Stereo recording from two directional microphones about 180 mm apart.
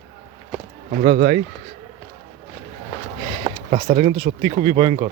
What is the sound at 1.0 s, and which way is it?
Speech, 35° right (ahead or behind).